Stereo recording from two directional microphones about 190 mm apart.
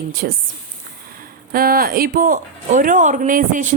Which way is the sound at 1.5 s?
50° right (ahead or behind).